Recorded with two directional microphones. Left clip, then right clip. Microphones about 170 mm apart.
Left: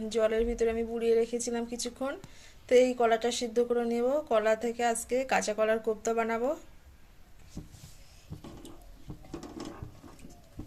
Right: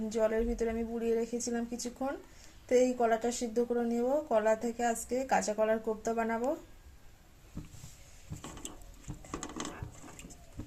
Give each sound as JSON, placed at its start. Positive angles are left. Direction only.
{"t": 0.1, "sound": "speech", "side_deg": 0}
{"t": 3.5, "sound": "speech", "side_deg": 10}
{"t": 9.1, "sound": "a sound", "side_deg": -30}